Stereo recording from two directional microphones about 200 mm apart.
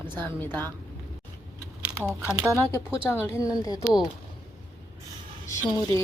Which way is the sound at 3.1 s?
15° left (ahead or behind).